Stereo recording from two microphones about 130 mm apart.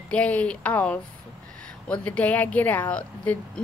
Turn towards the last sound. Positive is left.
turn(degrees=10)  # may be behind; listen again after turning